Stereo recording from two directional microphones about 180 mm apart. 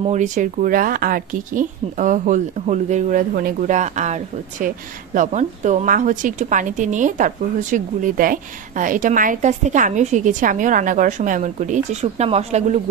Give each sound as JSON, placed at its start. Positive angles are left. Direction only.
{"t": 0.0, "sound": "speech", "side_deg": -40}